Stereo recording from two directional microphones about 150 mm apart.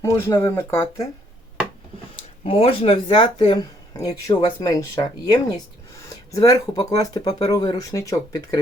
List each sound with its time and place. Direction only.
0.0 s speech: 20° left (ahead or behind)
2.1 s speech: 40° left (ahead or behind); by 8.5 s 20° left (ahead or behind)